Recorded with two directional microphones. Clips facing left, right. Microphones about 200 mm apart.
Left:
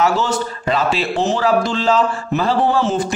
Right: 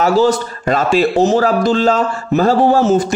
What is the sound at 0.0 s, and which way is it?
A man's voice, 40° right (ahead or behind).